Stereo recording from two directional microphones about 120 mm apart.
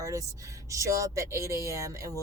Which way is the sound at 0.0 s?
25° right (ahead or behind).